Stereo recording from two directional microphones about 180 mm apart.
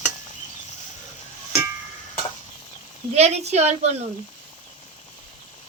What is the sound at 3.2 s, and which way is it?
Speech, 35° right (ahead or behind).